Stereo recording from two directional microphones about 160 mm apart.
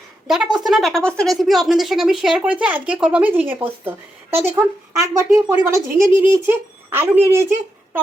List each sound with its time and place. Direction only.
0.3 s a woman's voice: 5° right (ahead or behind)